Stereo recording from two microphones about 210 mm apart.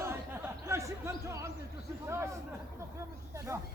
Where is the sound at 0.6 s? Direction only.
15° right (ahead or behind).